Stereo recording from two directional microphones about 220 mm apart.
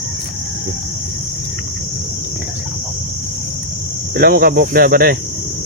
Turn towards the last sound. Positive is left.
turn(degrees=-45)  # may be behind; listen again after turning